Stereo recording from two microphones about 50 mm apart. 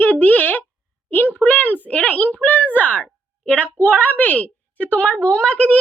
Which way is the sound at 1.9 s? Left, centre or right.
Left.